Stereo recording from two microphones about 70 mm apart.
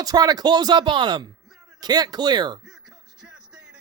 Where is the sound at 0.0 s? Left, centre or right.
Right.